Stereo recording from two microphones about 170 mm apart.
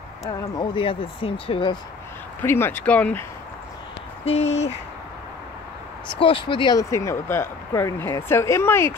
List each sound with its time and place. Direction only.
0.3 s speech: 30° left (ahead or behind)
2.4 s speech: 15° left (ahead or behind)
4.2 s speech: 40° left (ahead or behind)
6.1 s speech: 30° left (ahead or behind); by 8.9 s 15° left (ahead or behind)